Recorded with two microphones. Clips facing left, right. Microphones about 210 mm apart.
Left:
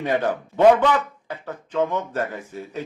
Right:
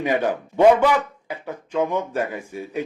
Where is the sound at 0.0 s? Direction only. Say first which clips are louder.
Right 1 dB; 10° right (ahead or behind).